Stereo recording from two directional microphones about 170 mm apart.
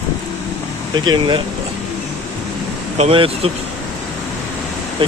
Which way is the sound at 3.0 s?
35° right (ahead or behind).